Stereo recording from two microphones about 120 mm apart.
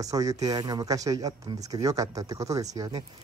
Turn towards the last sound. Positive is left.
turn(degrees=-30)  # may be behind; listen again after turning